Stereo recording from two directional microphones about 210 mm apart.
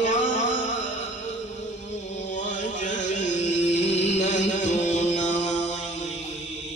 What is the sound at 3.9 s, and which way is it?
Chant, 35° left (ahead or behind).